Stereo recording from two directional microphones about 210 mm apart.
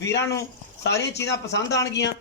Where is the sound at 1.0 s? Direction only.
55° left (ahead or behind).